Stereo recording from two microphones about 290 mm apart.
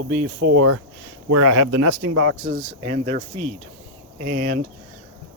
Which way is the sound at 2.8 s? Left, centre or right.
Right.